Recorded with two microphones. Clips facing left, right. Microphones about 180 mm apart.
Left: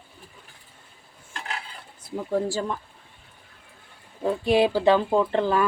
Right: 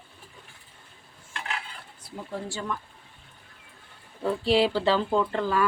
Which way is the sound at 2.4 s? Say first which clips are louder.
Left 5 dB; 35° left (ahead or behind).